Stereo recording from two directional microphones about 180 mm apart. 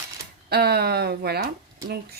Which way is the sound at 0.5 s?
65° right (ahead or behind).